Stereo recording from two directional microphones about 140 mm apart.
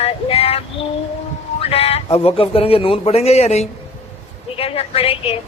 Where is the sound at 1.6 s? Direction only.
45° left (ahead or behind).